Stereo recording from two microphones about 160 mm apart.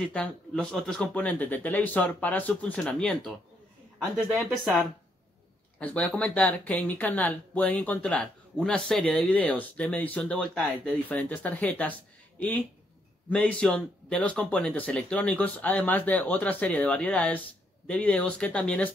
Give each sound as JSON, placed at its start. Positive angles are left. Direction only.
{"t": 0.0, "sound": "speech", "side_deg": 5}
{"t": 5.8, "sound": "speech", "side_deg": 10}